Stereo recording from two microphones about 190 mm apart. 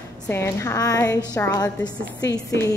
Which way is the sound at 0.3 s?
15° left (ahead or behind).